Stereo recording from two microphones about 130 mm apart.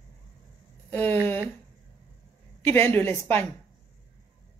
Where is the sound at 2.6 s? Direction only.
15° left (ahead or behind).